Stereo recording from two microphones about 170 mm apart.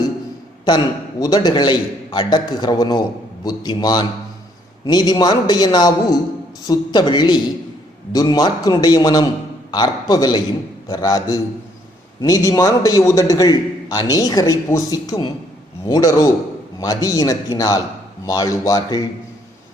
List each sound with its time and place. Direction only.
1.2 s a man's voice: 25° left (ahead or behind)